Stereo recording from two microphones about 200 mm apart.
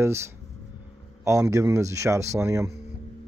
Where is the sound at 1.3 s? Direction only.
15° right (ahead or behind).